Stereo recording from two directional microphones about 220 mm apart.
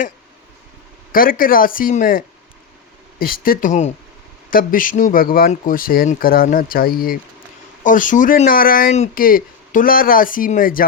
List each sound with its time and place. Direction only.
1.1 s speech: 40° left (ahead or behind)